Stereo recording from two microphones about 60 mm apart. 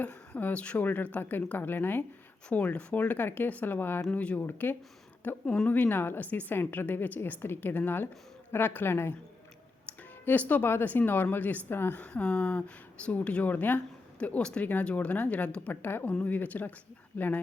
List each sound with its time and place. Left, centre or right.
0.0 s a woman's voice: left
2.5 s speech: left
4.1 s a woman's voice: left
10.2 s a woman's voice: left
12.1 s speech: centre
15.7 s a woman's voice: left